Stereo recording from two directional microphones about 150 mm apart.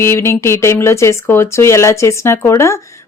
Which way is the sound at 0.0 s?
15° left (ahead or behind).